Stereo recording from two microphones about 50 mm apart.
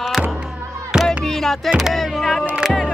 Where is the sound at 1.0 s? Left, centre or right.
Centre.